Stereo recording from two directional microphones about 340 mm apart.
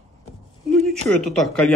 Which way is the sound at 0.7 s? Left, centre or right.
Centre.